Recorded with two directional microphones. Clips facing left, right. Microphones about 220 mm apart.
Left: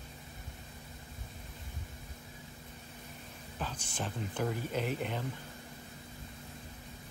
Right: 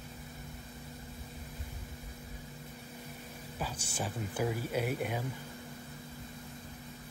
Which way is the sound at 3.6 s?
10° right (ahead or behind).